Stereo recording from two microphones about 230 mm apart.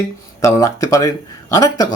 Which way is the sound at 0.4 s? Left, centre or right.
Centre.